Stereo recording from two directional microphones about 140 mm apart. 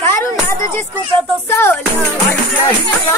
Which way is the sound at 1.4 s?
15° left (ahead or behind).